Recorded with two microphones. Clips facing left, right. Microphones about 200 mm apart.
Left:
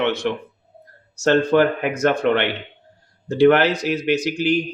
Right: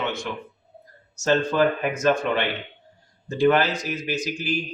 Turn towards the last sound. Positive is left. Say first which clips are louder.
# left 8 dB
turn(degrees=65)  # may be behind; listen again after turning